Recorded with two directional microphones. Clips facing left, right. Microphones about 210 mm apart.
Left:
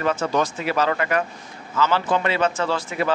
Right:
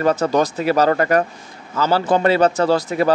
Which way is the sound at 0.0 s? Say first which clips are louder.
Right 5 dB; 40° right (ahead or behind).